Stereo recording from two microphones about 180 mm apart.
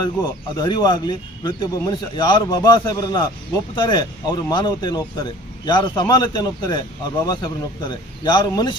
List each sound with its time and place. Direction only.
0.0 s speech: 20° left (ahead or behind)